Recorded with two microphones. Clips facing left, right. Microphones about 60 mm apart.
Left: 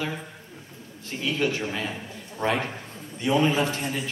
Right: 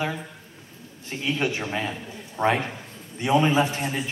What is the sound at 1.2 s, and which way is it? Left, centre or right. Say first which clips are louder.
Speech: even; right.